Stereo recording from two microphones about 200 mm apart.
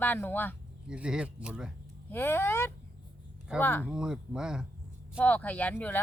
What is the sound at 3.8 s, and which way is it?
Speech, 5° right (ahead or behind).